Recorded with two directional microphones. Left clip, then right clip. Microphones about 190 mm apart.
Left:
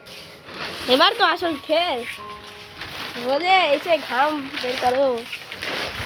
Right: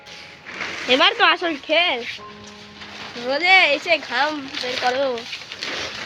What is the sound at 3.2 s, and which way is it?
Speech, 5° left (ahead or behind).